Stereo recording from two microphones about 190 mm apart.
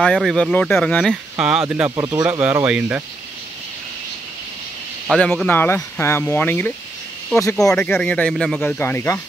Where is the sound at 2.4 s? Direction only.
5° right (ahead or behind).